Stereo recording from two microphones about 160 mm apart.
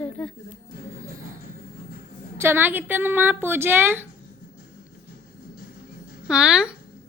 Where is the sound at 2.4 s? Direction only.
15° right (ahead or behind).